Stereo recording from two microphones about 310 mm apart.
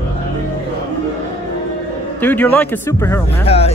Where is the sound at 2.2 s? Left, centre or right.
Centre.